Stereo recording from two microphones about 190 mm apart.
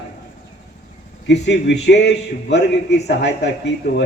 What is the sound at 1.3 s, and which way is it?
A man's voice, 65° left (ahead or behind).